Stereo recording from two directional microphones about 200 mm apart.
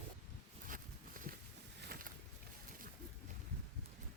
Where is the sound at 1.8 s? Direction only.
50° right (ahead or behind).